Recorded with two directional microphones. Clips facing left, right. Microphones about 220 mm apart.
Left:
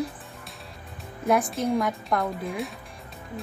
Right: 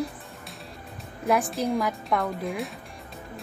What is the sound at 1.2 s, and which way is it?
Speech, centre (ahead or behind).